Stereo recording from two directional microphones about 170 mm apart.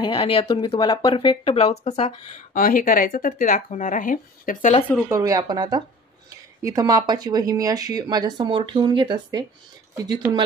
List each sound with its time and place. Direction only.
0.0 s speech: 30° left (ahead or behind); by 4.7 s 50° left (ahead or behind)
5.1 s speech: 25° right (ahead or behind)